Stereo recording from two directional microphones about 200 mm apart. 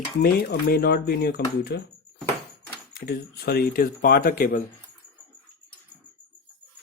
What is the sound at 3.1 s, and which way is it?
Speech, 50° left (ahead or behind).